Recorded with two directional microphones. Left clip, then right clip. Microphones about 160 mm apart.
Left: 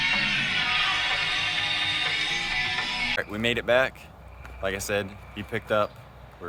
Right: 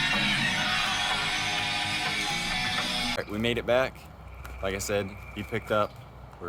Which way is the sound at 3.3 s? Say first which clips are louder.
Left 2 dB; 5° left (ahead or behind).